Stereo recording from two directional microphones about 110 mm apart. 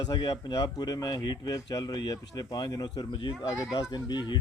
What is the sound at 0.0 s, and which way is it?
Speech, 40° left (ahead or behind).